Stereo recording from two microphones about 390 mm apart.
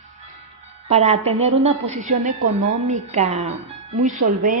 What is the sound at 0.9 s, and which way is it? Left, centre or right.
A woman's voice, centre.